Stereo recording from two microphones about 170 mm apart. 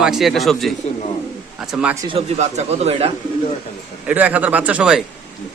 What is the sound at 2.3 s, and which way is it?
Speech, 40° right (ahead or behind).